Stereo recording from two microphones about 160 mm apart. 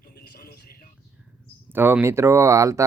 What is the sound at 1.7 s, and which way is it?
Speech, 15° right (ahead or behind).